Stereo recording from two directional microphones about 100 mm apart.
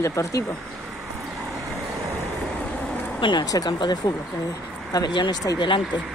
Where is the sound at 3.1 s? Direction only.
55° left (ahead or behind).